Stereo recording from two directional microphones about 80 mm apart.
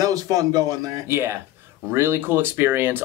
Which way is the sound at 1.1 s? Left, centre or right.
Right.